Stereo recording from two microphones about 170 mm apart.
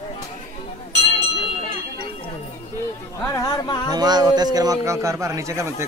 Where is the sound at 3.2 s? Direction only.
20° left (ahead or behind).